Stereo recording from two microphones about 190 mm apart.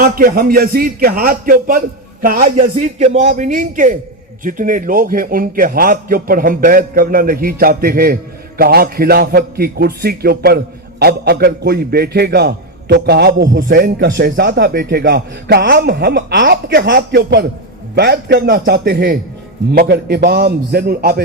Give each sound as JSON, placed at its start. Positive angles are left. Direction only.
{"t": 0.0, "sound": "a man's voice", "side_deg": -50}
{"t": 13.7, "sound": "a man's voice", "side_deg": -55}